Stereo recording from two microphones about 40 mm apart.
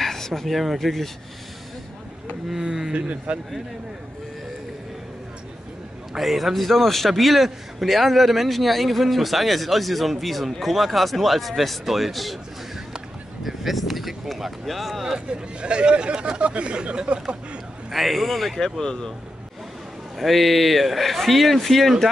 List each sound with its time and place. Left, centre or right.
0.0 s speech: centre
2.5 s speech: centre
3.3 s speech: right
6.1 s a man's voice: centre
13.4 s a man's voice: centre
15.1 s speech: right
17.9 s a man's voice: centre
18.8 s speech: centre
20.2 s a man's voice: centre